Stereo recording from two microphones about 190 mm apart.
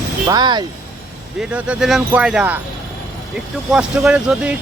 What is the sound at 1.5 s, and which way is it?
Speech, 5° right (ahead or behind).